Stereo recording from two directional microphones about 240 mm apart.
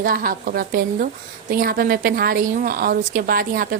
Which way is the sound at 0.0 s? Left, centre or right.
Right.